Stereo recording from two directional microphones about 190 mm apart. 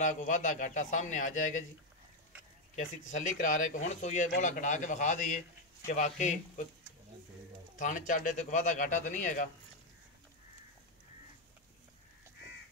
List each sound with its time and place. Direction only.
0.0 s a man's voice: 40° left (ahead or behind)
3.1 s a man's voice: 40° left (ahead or behind)
7.7 s pigeon: 45° left (ahead or behind)
8.1 s speech: 45° left (ahead or behind)